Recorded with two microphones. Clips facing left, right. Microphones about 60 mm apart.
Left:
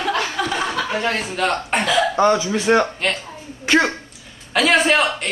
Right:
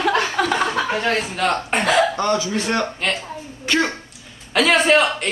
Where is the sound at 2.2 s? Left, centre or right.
Centre.